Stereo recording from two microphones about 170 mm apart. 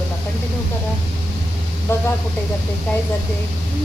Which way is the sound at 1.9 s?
15° left (ahead or behind).